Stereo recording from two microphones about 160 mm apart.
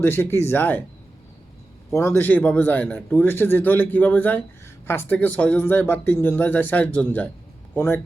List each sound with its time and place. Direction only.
0.0 s speech: 15° left (ahead or behind)
1.9 s speech: 15° left (ahead or behind)